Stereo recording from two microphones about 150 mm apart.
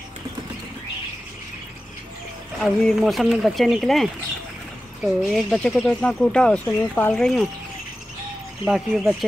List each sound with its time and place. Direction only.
2.6 s speech: centre (ahead or behind)
8.6 s speech: centre (ahead or behind)